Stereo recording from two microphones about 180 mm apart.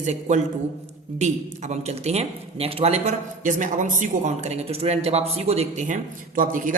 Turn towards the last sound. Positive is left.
turn(degrees=-50)  # may be behind; listen again after turning